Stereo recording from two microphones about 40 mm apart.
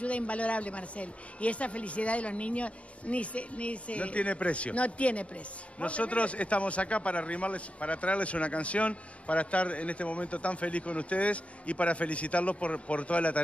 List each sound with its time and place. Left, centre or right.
0.0 s speech: left